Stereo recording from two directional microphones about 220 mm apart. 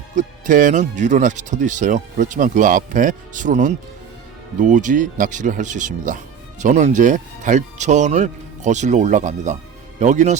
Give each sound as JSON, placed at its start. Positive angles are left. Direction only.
{"t": 0.2, "sound": "speech", "side_deg": -35}